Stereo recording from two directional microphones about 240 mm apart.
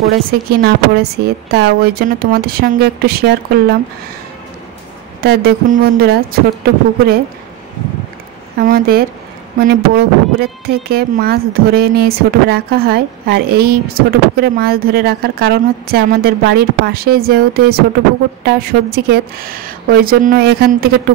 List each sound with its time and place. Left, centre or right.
0.3 s speech: right
5.2 s speech: right
8.5 s speech: right